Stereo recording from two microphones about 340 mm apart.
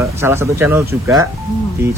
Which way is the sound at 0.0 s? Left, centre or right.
Centre.